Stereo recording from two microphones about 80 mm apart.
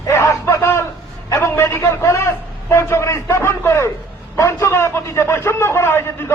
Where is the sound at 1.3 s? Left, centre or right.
Left.